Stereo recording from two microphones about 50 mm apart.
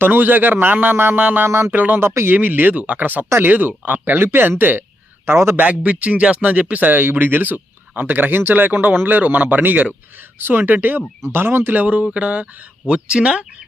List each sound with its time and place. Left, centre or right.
0.0 s a man's voice: right
0.9 s speech: right
1.5 s speech: right
1.7 s speech: right
2.0 s speech: right
2.3 s speech: right
2.7 s speech: right
5.2 s a man's voice: right
5.6 s speech: right
10.3 s a man's voice: right
11.7 s speech: right